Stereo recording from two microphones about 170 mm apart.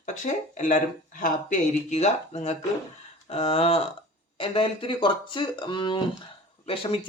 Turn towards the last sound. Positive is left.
turn(degrees=30)  # may be behind; listen again after turning